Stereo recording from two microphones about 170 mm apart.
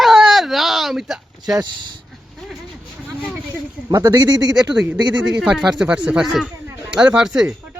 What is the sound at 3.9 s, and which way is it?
Speech, 20° right (ahead or behind).